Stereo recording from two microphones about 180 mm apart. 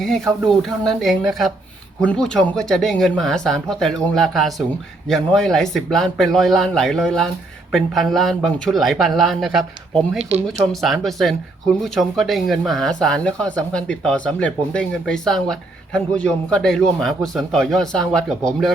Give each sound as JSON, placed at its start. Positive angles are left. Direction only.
{"t": 0.4, "sound": "speech", "side_deg": 0}
{"t": 10.2, "sound": "speech", "side_deg": -35}
{"t": 10.7, "sound": "speech", "side_deg": 0}